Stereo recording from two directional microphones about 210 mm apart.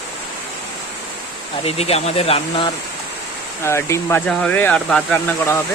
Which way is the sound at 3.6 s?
10° left (ahead or behind).